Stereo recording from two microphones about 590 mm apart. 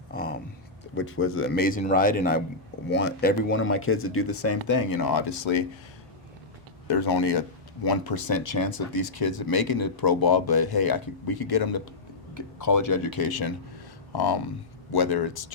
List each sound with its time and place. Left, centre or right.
0.1 s a sound: centre
0.9 s a man's voice: centre; by 5.6 s left
6.8 s speech: left